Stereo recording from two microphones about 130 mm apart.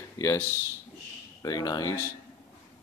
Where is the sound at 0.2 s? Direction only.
25° left (ahead or behind).